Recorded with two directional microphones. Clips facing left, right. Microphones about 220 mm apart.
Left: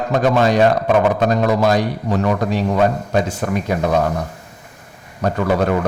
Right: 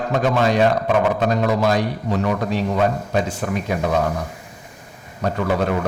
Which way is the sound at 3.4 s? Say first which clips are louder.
Left 3 dB; 45° left (ahead or behind).